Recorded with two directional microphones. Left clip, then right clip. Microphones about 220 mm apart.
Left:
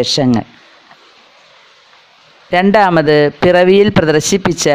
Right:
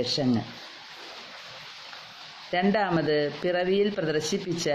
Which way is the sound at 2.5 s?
45° left (ahead or behind).